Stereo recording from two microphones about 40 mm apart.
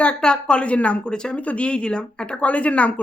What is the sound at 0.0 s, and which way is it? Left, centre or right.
Speech, left.